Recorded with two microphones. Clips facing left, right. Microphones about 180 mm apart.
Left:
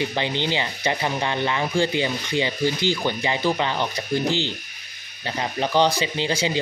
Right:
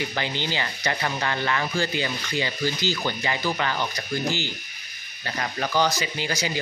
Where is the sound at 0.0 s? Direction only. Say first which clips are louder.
Left 4 dB; 20° left (ahead or behind).